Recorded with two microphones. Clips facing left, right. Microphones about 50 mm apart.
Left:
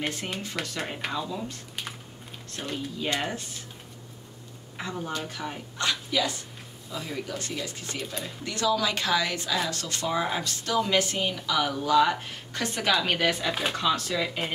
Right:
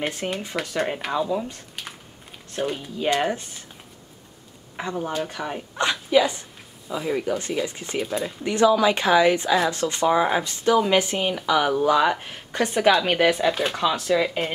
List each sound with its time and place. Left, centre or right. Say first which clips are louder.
0.0 s speech: right 5 dB; centre
1.8 s typing: even; centre
2.5 s speech: right 6 dB; centre
4.7 s speech: right 6 dB; right
13.5 s speech: right 6 dB; centre
13.7 s speech: right 5 dB; centre